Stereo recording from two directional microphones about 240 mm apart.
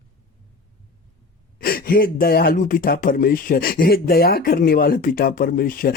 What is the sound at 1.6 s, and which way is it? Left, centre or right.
Speech, left.